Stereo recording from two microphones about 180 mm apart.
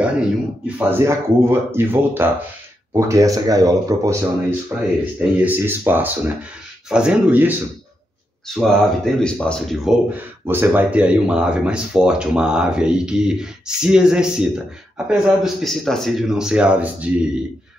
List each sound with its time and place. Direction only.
0.0 s speech: 5° right (ahead or behind)
4.7 s speech: 5° right (ahead or behind)
8.5 s speech: centre (ahead or behind)
10.1 s speech: 10° right (ahead or behind)